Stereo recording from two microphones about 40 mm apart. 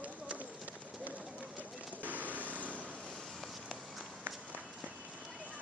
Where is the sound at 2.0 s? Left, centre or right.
Right.